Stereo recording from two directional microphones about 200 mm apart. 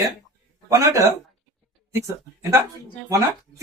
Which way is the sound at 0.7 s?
15° right (ahead or behind).